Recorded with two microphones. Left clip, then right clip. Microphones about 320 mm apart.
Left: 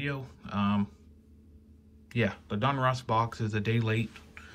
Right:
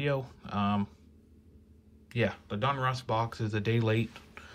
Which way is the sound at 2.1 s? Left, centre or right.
Centre.